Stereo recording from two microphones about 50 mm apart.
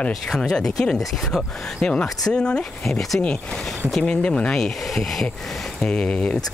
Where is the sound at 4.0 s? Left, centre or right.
Left; by 5.3 s centre.